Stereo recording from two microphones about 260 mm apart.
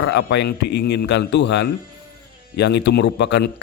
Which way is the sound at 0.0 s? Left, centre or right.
Left.